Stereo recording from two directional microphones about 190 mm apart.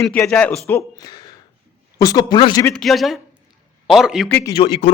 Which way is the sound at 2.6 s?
5° left (ahead or behind).